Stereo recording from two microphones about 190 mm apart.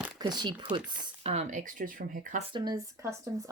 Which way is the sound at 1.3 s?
40° right (ahead or behind).